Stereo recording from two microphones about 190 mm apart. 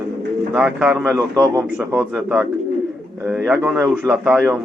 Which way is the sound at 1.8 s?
5° right (ahead or behind).